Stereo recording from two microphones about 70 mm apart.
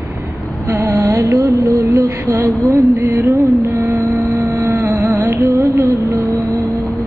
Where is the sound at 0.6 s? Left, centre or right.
Right.